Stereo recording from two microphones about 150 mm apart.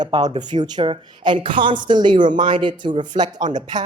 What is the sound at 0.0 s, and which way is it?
Speech, 25° right (ahead or behind).